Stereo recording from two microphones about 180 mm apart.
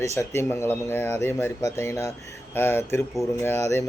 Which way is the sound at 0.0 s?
15° left (ahead or behind).